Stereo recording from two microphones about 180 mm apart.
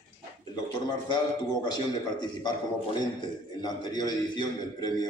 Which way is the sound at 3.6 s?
20° left (ahead or behind).